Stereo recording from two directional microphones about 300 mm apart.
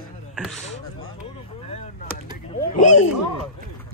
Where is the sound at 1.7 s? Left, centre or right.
Left.